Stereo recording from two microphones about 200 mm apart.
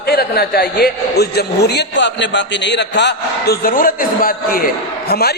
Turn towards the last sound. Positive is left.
turn(degrees=50)  # may be behind; listen again after turning